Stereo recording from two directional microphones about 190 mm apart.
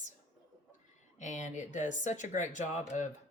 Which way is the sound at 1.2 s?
40° left (ahead or behind).